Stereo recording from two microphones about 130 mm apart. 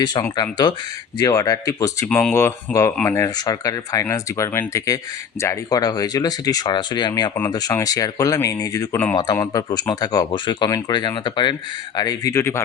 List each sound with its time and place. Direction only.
0.0 s speech: 30° left (ahead or behind)
2.0 s speech: 10° left (ahead or behind)
2.3 s speech: 20° left (ahead or behind)
3.2 s speech: 30° left (ahead or behind)